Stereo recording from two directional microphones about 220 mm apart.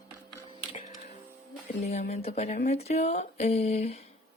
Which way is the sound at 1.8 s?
30° left (ahead or behind).